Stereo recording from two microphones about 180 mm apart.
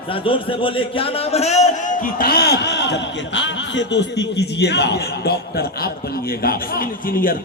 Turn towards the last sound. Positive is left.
turn(degrees=55)  # may be behind; listen again after turning